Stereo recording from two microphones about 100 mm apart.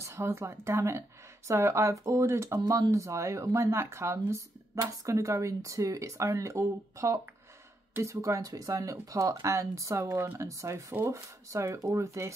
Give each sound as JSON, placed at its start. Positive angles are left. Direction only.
{"t": 0.0, "sound": "speech", "side_deg": -25}